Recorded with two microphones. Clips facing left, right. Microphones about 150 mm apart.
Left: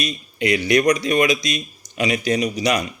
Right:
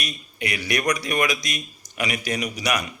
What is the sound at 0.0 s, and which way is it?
Speech, 25° left (ahead or behind).